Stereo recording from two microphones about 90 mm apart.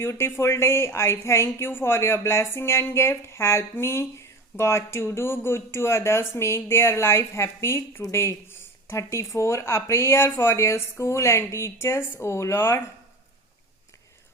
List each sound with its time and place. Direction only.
0.0 s speech: 30° left (ahead or behind)